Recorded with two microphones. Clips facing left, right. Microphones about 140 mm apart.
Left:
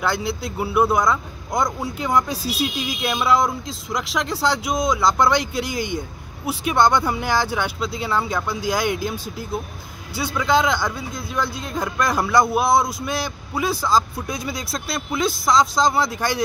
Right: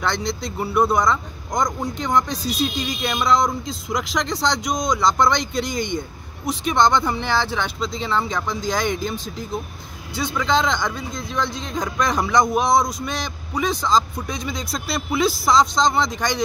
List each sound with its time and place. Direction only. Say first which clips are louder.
0.0 s speech: left 1 dB; 5° left (ahead or behind)